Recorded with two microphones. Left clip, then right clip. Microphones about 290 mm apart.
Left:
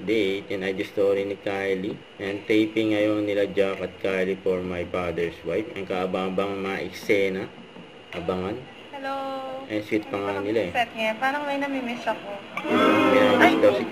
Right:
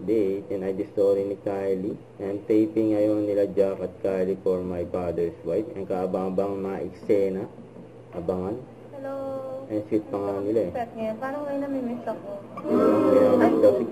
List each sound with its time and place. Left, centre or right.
0.1 s speech: left
9.7 s speech: left
10.7 s a woman's voice: centre